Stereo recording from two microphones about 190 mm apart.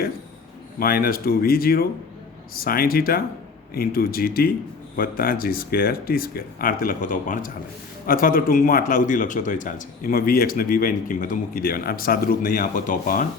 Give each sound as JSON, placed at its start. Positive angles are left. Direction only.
{"t": 0.8, "sound": "speech", "side_deg": 50}